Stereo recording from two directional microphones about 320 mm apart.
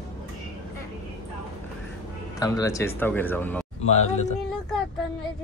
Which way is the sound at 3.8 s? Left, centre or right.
Left.